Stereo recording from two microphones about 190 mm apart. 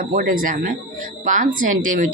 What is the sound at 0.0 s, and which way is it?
Speech, 45° right (ahead or behind).